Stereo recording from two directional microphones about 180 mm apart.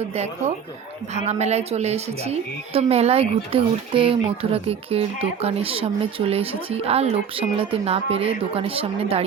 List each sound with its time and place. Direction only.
1.1 s speech: 40° right (ahead or behind)